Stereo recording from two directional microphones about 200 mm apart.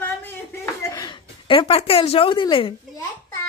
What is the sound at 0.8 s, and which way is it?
A woman's voice, 20° left (ahead or behind).